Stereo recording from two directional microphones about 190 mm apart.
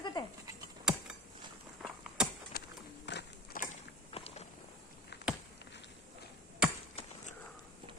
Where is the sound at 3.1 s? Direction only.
65° left (ahead or behind).